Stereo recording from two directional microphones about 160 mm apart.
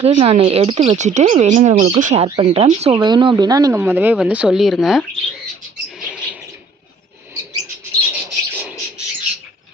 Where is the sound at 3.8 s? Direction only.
10° right (ahead or behind).